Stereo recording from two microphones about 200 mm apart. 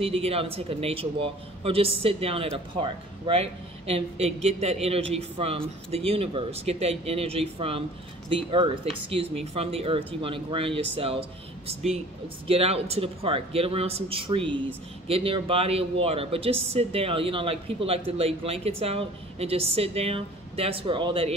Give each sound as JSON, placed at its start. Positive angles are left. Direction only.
{"t": 0.0, "sound": "speech", "side_deg": -30}